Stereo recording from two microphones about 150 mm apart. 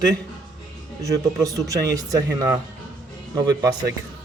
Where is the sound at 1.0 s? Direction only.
20° right (ahead or behind).